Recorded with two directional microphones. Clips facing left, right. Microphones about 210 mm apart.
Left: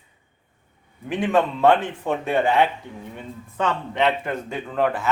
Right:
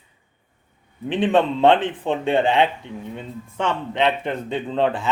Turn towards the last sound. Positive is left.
turn(degrees=-30)  # may be behind; listen again after turning